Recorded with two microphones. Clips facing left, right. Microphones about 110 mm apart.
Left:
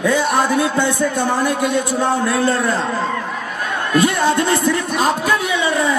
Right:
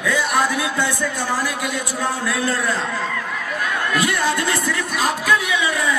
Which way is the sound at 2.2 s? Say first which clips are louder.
Left 5 dB; 30° left (ahead or behind).